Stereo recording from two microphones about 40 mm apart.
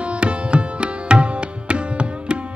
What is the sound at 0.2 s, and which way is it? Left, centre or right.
Tabla, right.